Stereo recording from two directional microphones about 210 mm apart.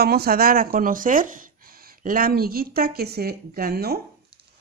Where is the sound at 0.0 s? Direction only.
45° right (ahead or behind).